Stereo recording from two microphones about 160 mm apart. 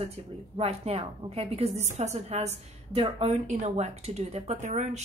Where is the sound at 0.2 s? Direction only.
40° right (ahead or behind).